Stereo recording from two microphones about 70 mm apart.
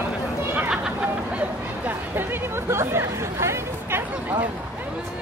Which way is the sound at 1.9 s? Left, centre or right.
Right.